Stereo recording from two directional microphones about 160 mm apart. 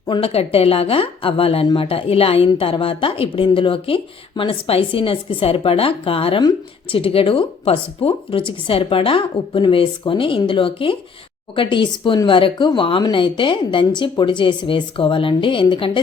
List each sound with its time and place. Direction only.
0.1 s a woman's voice: 35° left (ahead or behind)